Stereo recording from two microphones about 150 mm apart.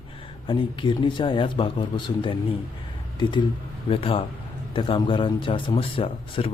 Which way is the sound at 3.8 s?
40° left (ahead or behind).